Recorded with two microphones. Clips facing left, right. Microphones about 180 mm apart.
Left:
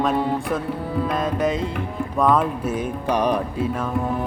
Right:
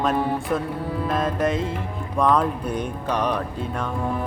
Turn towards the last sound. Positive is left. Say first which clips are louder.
# left 3 dB
turn(degrees=10)  # may be behind; listen again after turning